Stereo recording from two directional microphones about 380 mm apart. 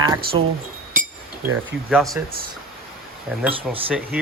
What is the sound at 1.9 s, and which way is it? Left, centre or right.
Speech, centre.